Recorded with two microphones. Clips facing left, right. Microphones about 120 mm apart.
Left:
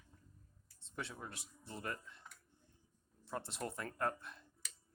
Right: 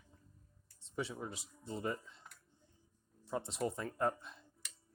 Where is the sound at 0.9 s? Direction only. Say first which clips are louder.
Right 6 dB; 15° right (ahead or behind).